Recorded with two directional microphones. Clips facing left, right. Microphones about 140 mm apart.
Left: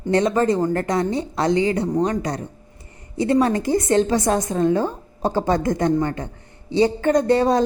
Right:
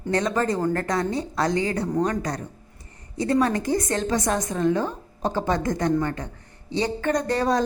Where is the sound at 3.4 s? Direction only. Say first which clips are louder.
Left 3 dB; 30° left (ahead or behind).